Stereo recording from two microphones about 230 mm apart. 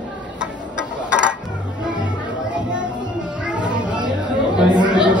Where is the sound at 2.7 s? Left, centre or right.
Centre.